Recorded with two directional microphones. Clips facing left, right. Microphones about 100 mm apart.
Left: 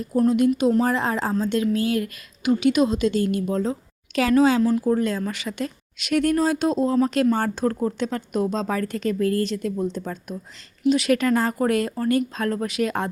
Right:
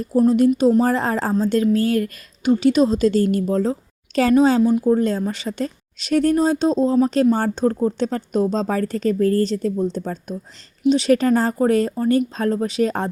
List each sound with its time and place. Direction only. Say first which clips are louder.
0.3 s speech: right 3 dB; 35° right (ahead or behind)
4.6 s speech: right 4 dB; 20° right (ahead or behind)
4.9 s speech: right 4 dB; 30° right (ahead or behind)